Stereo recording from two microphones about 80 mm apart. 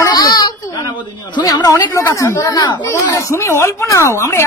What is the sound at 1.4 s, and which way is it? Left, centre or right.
Speech, left.